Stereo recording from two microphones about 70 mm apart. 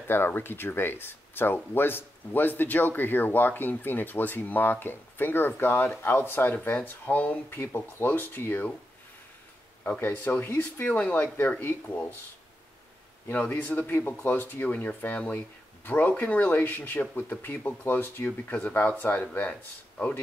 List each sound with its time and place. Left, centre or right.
0.1 s speech: left
9.8 s speech: left
13.3 s speech: left
17.0 s speech: centre
17.4 s speech: left
19.5 s speech: centre